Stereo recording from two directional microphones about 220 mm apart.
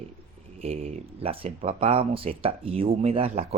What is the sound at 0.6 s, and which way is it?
Speech, 30° right (ahead or behind).